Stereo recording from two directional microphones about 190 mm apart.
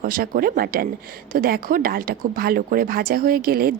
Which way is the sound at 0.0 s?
50° right (ahead or behind).